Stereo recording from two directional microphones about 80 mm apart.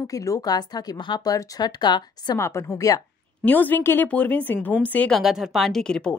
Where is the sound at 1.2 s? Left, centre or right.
Left.